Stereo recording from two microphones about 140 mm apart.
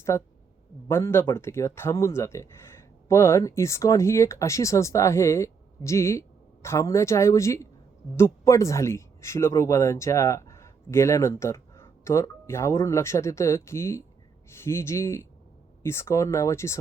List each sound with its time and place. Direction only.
0.1 s speech: 20° left (ahead or behind)